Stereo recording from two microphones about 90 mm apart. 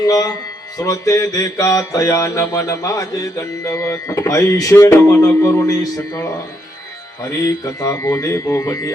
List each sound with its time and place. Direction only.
0.0 s speech: 45° left (ahead or behind)
0.8 s mantra: 40° left (ahead or behind)